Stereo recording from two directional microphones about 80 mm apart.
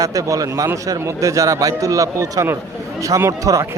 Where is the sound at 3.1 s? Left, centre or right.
Right.